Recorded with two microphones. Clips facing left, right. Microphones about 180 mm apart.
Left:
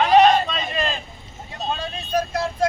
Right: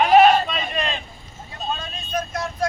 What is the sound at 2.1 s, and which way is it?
Music, 30° left (ahead or behind).